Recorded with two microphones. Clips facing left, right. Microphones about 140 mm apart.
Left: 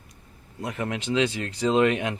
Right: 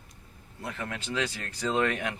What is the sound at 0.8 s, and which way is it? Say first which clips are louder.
Speech: left 8 dB; 20° left (ahead or behind).